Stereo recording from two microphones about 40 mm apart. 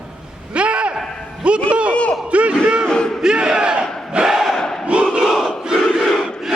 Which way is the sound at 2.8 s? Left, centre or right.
Centre.